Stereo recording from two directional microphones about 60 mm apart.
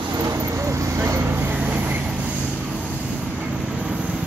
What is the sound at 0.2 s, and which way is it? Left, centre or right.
Vehicle, right.